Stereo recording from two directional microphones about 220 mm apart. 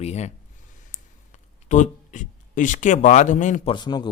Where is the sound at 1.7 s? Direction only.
35° left (ahead or behind).